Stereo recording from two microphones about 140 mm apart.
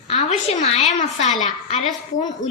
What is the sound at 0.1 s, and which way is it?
A woman's voice, 55° left (ahead or behind).